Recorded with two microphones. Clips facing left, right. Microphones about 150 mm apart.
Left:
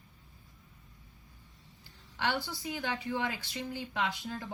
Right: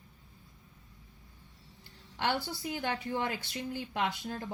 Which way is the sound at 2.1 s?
55° right (ahead or behind).